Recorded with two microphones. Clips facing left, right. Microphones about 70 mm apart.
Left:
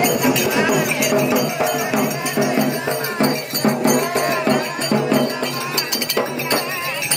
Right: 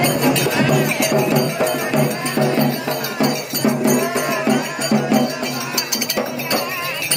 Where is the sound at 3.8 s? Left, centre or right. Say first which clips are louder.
Left 1 dB; left.